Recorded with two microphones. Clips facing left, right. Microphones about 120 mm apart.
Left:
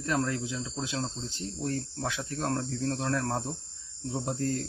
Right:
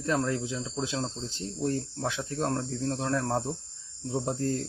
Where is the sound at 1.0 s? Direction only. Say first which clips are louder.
Right 1 dB; 5° right (ahead or behind).